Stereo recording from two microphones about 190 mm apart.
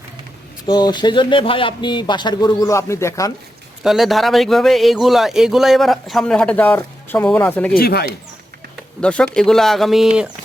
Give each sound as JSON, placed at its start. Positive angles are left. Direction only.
{"t": 0.7, "sound": "speech", "side_deg": 20}
{"t": 3.8, "sound": "a man's voice", "side_deg": 0}
{"t": 7.8, "sound": "speech", "side_deg": 55}
{"t": 9.0, "sound": "a man's voice", "side_deg": 5}